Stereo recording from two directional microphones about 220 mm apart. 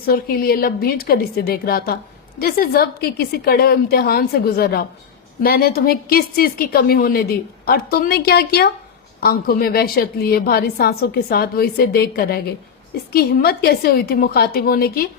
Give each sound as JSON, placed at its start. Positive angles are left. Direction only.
{"t": 0.0, "sound": "a woman's voice", "side_deg": 45}